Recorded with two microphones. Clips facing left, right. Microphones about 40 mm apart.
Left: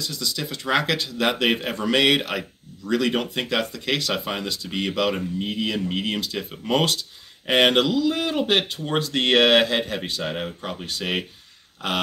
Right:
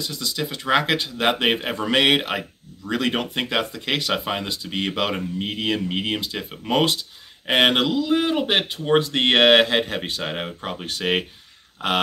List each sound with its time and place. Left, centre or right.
0.0 s speech: right
5.9 s speech: right
10.9 s speech: right